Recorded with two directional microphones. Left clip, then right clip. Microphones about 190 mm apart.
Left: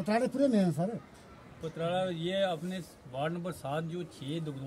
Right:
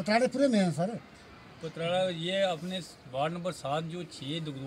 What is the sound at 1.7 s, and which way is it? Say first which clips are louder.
Speech: right 3 dB; 10° right (ahead or behind).